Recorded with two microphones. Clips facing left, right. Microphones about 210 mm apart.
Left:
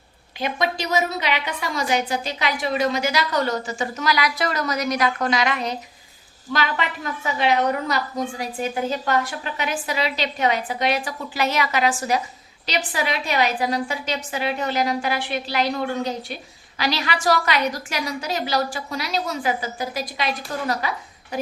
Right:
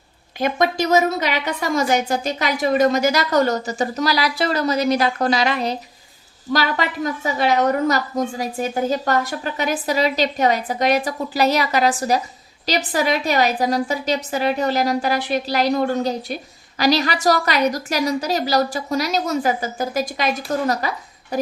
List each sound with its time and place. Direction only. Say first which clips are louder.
0.3 s a woman's voice: right 5 dB; 45° right (ahead or behind)